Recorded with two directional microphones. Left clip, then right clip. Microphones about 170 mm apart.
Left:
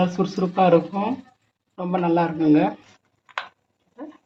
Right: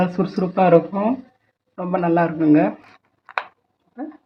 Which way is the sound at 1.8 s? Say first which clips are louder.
Right 2 dB; 25° right (ahead or behind).